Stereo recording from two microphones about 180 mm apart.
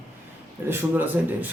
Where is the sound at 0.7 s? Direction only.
10° right (ahead or behind).